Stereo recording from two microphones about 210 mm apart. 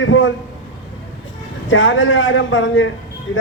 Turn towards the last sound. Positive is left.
turn(degrees=65)  # may be behind; listen again after turning